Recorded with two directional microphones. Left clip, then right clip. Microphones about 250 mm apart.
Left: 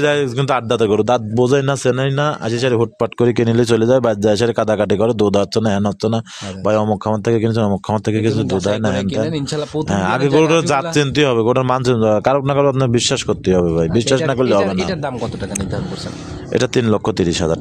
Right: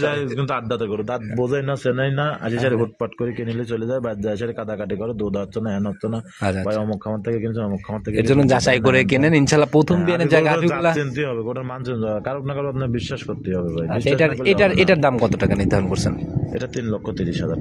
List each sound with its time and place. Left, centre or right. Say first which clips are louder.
0.0 s a man's voice: left 6 dB; left
8.5 s speech: right 2 dB; right
9.9 s a man's voice: left 3 dB; left
14.4 s speech: even; right
16.5 s a man's voice: left 12 dB; left